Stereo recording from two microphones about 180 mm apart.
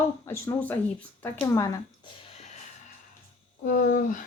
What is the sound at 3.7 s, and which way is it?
Speech, 45° left (ahead or behind).